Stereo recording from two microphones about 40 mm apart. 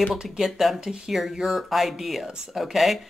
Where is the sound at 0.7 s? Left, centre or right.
Centre.